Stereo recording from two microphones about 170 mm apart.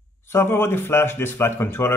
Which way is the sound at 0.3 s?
15° left (ahead or behind).